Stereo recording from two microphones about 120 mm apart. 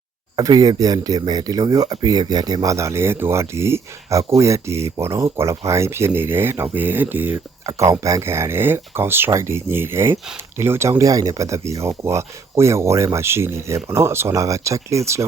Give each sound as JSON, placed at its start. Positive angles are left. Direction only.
{"t": 0.3, "sound": "speech", "side_deg": -35}